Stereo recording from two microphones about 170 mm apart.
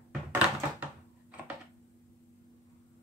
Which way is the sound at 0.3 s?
10° right (ahead or behind).